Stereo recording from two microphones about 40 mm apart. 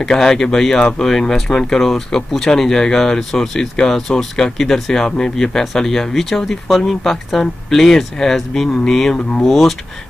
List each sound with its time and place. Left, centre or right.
0.0 s speech: centre
9.1 s speech: left
9.5 s speech: centre